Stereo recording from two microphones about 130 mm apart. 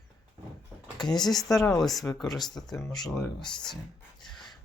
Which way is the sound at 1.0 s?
30° left (ahead or behind).